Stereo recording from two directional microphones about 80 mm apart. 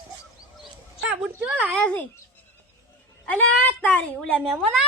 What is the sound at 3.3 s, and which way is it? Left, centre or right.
Speech, centre.